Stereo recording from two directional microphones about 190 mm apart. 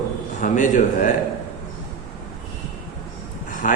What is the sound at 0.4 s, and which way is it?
Speech, 40° left (ahead or behind).